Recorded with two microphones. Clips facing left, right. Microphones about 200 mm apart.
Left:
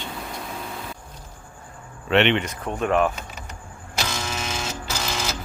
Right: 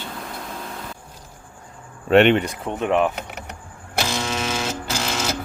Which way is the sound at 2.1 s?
45° right (ahead or behind).